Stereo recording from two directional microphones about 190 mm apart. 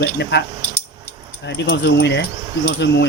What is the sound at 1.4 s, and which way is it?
Speech, 65° left (ahead or behind).